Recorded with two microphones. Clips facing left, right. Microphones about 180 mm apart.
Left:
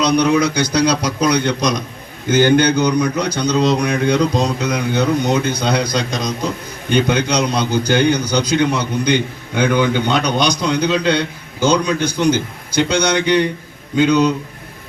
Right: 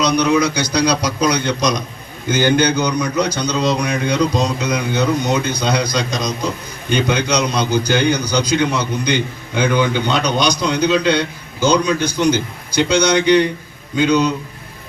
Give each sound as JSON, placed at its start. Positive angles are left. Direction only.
{"t": 0.0, "sound": "a man's voice", "side_deg": 55}